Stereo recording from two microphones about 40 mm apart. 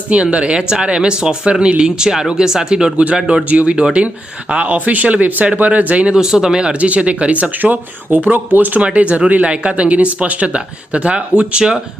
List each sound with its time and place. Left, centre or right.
0.1 s speech: right
3.5 s speech: right
4.7 s speech: right
6.1 s speech: centre
6.7 s speech: right
7.6 s speech: right
8.8 s speech: right